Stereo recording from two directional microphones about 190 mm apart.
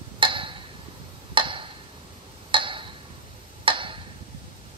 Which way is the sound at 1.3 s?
25° right (ahead or behind).